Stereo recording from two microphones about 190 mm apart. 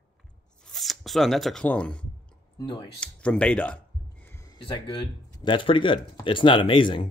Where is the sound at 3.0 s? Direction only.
5° left (ahead or behind).